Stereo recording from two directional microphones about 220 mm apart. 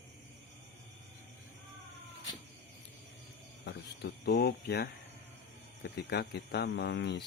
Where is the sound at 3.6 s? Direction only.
50° left (ahead or behind).